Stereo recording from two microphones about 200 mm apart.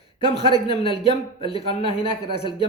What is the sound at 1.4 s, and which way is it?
Speech, 30° left (ahead or behind).